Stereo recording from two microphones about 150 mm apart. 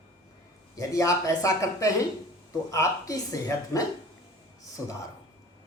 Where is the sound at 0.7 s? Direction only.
20° left (ahead or behind).